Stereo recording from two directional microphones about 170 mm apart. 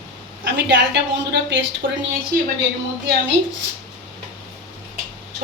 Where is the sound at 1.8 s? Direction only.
60° right (ahead or behind).